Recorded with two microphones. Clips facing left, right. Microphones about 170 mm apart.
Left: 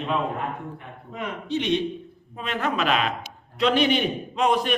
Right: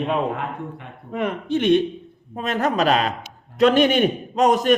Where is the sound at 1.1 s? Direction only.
55° right (ahead or behind).